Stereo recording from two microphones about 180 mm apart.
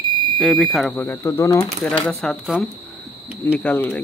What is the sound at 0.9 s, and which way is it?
Speech, 10° left (ahead or behind).